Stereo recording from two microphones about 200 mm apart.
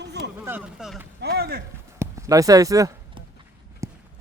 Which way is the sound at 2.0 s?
15° right (ahead or behind).